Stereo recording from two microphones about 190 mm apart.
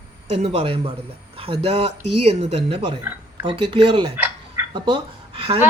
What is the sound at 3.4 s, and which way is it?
Speech, 25° right (ahead or behind).